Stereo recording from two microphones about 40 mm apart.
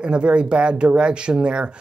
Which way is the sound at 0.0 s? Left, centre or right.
Right.